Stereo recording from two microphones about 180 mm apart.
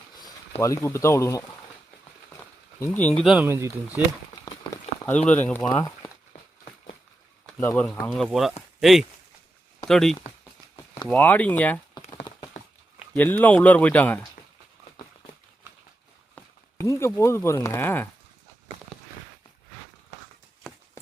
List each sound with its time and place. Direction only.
0.6 s speech: 15° left (ahead or behind)
2.8 s speech: 10° left (ahead or behind)
3.4 s speech: 15° right (ahead or behind)
4.5 s a sound: 20° left (ahead or behind)
5.0 s speech: 10° left (ahead or behind)
7.6 s speech: 15° left (ahead or behind)
7.9 s speech: centre (ahead or behind)
12.6 s a sound: 40° left (ahead or behind)
13.1 s speech: 10° left (ahead or behind)
16.3 s a sound: 15° left (ahead or behind)
17.2 s speech: 15° left (ahead or behind)